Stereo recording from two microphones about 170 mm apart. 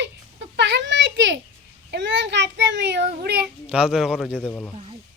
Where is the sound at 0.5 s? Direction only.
90° right.